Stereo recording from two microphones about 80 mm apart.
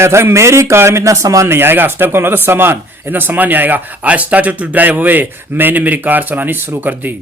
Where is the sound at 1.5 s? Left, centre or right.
Right.